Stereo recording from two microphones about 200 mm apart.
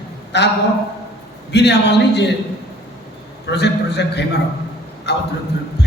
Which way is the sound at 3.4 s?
55° left (ahead or behind).